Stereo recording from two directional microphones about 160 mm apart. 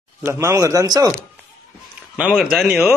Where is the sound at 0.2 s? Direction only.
15° right (ahead or behind).